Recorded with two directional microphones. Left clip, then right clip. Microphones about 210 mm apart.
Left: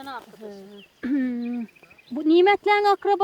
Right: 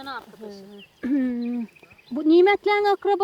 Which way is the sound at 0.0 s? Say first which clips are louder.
Right 1 dB; 40° right (ahead or behind).